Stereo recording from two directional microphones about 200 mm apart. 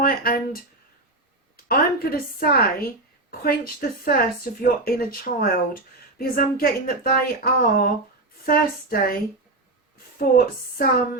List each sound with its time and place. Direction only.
0.0 s speech: 50° left (ahead or behind)
1.6 s speech: 50° left (ahead or behind)
10.3 s speech: 45° left (ahead or behind)